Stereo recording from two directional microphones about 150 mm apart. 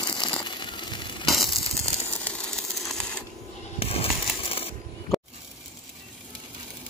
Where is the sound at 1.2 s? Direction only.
Centre (ahead or behind).